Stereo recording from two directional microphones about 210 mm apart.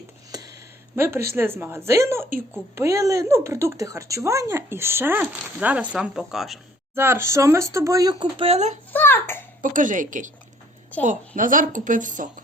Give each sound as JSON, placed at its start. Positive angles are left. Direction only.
{"t": 0.3, "sound": "a sound", "side_deg": -20}
{"t": 0.9, "sound": "speech", "side_deg": -10}
{"t": 8.9, "sound": "a child's voice", "side_deg": 10}
{"t": 9.6, "sound": "speech", "side_deg": -40}